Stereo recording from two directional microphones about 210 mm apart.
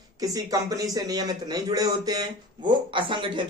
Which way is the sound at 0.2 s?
15° right (ahead or behind).